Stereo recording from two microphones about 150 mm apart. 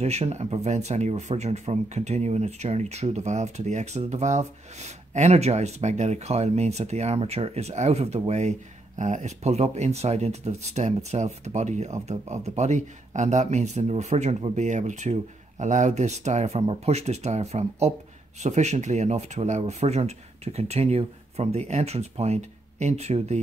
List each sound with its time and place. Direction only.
0.0 s speech: 45° right (ahead or behind)